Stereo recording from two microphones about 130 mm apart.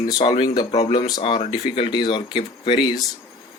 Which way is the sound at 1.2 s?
45° left (ahead or behind).